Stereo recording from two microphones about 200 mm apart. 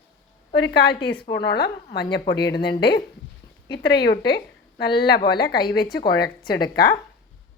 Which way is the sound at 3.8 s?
55° left (ahead or behind).